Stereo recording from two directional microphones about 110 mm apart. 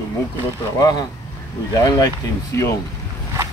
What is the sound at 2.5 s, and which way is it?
Speech, 25° left (ahead or behind).